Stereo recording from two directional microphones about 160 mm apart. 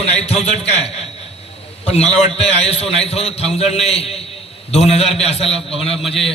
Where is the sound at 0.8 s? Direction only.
40° left (ahead or behind).